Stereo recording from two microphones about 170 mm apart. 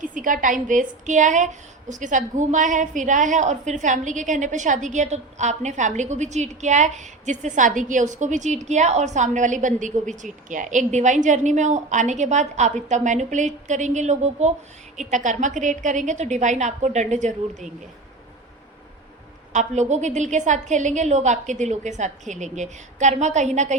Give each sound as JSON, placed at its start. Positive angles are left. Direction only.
{"t": 0.0, "sound": "a woman's voice", "side_deg": -50}
{"t": 19.5, "sound": "a woman's voice", "side_deg": -45}